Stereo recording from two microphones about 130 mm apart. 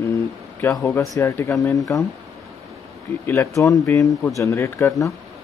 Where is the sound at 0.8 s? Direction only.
20° left (ahead or behind).